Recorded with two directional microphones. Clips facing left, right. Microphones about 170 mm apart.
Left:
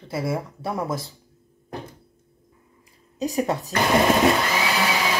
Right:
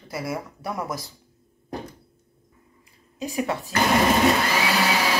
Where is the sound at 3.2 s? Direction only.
40° left (ahead or behind).